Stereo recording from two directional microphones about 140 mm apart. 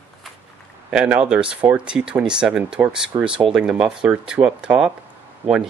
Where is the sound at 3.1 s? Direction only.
30° right (ahead or behind).